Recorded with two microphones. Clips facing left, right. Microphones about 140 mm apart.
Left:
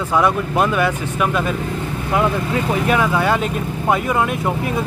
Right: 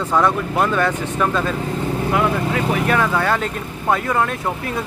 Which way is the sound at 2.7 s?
15° left (ahead or behind).